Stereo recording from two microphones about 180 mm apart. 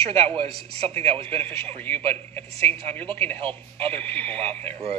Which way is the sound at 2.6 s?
35° right (ahead or behind).